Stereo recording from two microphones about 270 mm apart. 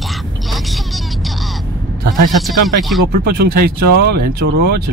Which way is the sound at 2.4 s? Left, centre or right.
Centre.